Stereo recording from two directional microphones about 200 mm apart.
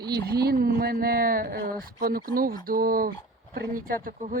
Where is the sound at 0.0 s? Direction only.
55° right (ahead or behind).